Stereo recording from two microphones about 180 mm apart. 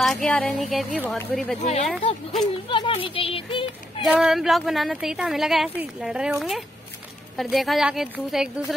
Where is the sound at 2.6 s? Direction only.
30° left (ahead or behind).